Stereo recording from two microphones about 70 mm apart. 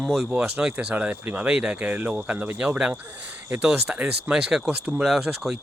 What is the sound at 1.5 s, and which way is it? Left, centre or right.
Speech, centre.